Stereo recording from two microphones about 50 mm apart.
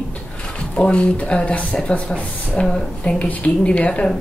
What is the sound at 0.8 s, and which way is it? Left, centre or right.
Speech, centre.